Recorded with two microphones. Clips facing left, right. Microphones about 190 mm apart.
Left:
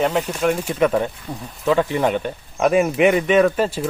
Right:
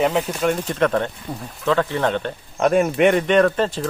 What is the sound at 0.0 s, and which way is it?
Speech, centre (ahead or behind).